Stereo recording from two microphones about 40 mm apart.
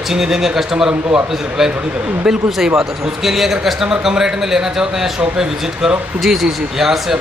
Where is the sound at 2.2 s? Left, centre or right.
Centre.